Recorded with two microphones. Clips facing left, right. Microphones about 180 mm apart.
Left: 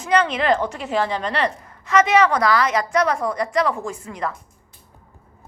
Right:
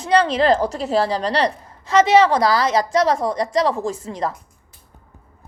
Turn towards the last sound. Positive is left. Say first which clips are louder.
# right 4 dB
turn(degrees=-35)  # may be behind; listen again after turning